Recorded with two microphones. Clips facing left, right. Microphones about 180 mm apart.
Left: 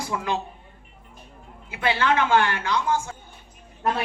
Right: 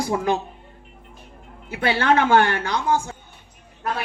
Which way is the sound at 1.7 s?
40° right (ahead or behind).